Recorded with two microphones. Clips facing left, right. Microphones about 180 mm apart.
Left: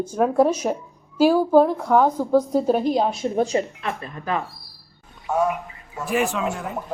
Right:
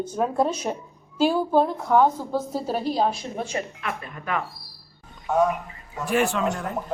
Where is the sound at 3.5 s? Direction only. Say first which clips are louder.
Left 6 dB; 35° left (ahead or behind).